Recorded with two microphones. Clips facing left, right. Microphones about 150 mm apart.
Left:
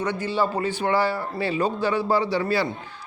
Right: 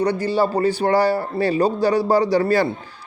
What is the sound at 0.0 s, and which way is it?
A man's voice, 35° right (ahead or behind).